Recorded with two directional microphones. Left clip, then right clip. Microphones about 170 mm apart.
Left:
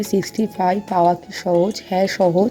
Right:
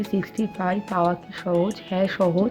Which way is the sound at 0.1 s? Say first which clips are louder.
Left 7 dB; 30° left (ahead or behind).